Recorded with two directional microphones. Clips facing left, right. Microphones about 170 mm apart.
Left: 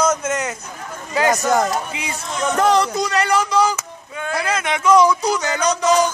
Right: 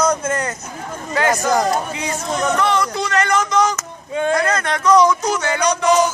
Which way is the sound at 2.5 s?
40° left (ahead or behind).